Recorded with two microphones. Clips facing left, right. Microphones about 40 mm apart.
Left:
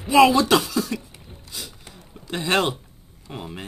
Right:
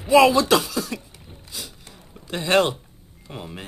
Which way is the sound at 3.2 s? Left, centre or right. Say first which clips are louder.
Left 1 dB; centre.